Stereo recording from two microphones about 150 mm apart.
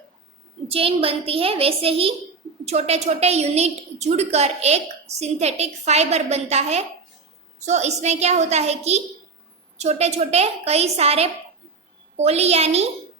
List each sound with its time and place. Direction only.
0.7 s a woman's voice: 40° right (ahead or behind)